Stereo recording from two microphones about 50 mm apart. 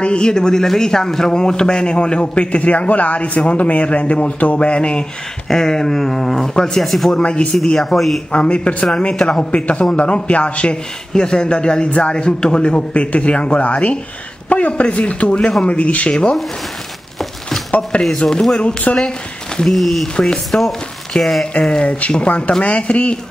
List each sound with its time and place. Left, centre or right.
0.0 s a man's voice: centre
5.5 s speech: centre
7.2 s a man's voice: left
7.9 s speech: centre
8.3 s a man's voice: left
9.1 s a man's voice: centre
18.1 s a man's voice: centre
19.7 s speech: centre
20.5 s a man's voice: left
21.2 s speech: centre
21.5 s a man's voice: left